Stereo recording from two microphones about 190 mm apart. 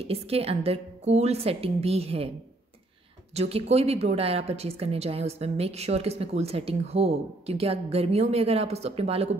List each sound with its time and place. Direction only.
0.0 s a woman's voice: 30° right (ahead or behind)
3.3 s a woman's voice: 35° right (ahead or behind)